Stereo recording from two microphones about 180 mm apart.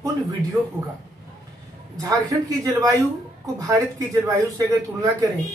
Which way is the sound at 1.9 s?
20° right (ahead or behind).